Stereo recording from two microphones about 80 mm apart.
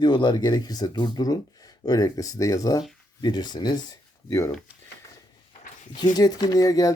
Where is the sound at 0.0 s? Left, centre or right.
Left.